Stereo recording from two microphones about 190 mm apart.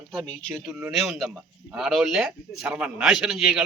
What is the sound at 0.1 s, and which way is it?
A man's voice, centre (ahead or behind).